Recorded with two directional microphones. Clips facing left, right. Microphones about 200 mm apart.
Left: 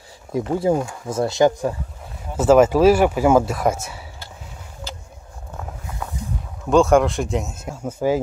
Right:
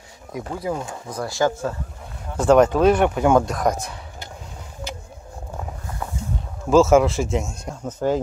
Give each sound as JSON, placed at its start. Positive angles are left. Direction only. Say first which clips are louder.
{"t": 0.3, "sound": "speech", "louder": "left 7 dB", "side_deg": 30}
{"t": 2.3, "sound": "speech", "louder": "left 2 dB", "side_deg": 5}
{"t": 6.7, "sound": "speech", "louder": "even", "side_deg": -5}